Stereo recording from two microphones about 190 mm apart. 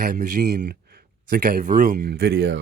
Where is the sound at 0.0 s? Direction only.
50° right (ahead or behind).